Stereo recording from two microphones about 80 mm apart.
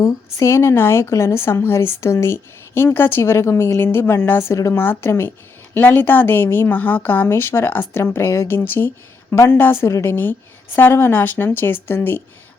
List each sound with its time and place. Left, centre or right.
0.3 s a woman's voice: left